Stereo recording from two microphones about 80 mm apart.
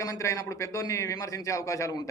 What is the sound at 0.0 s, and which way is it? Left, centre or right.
A man's voice, left.